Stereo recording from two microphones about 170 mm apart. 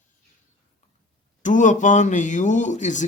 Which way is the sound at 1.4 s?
45° left (ahead or behind).